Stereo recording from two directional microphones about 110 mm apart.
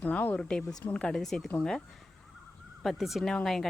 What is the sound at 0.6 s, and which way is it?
Speech, 35° left (ahead or behind).